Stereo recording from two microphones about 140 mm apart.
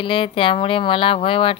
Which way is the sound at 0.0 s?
40° left (ahead or behind).